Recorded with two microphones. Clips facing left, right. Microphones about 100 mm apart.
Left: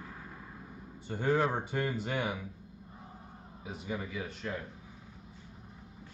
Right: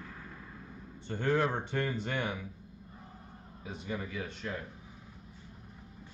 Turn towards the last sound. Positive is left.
turn(degrees=5)  # may be behind; listen again after turning